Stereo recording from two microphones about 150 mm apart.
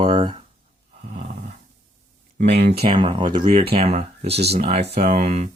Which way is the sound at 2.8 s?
35° right (ahead or behind).